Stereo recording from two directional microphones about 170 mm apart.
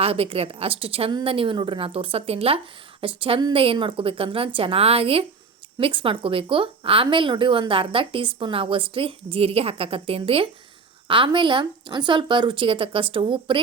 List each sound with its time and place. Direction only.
0.0 s a woman's voice: 35° right (ahead or behind)